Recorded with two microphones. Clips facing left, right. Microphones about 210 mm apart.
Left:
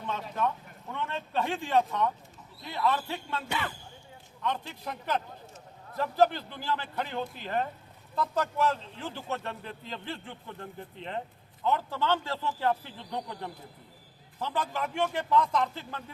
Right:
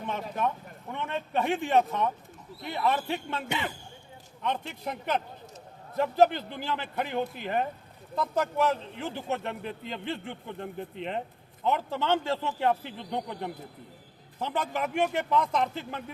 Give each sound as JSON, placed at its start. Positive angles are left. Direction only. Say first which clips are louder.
{"t": 0.0, "sound": "a man's voice", "louder": "right 1 dB", "side_deg": -15}